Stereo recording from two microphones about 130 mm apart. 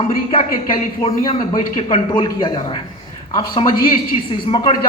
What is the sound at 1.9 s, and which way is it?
A man's voice, 35° left (ahead or behind).